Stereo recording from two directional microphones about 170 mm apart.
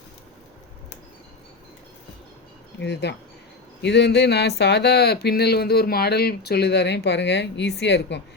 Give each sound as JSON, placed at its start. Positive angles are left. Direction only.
{"t": 2.8, "sound": "speech", "side_deg": 90}